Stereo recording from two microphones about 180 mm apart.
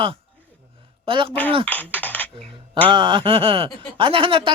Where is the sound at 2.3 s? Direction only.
30° right (ahead or behind).